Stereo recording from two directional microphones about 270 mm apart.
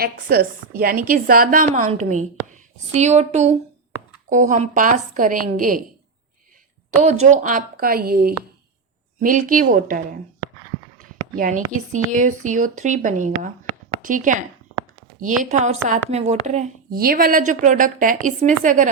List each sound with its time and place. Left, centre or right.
0.0 s a woman's voice: right
7.0 s a woman's voice: right
11.3 s a woman's voice: right